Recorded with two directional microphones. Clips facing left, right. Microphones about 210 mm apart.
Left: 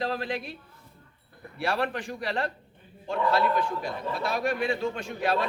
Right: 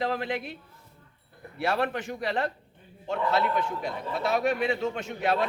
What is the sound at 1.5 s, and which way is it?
A man's voice, 20° right (ahead or behind).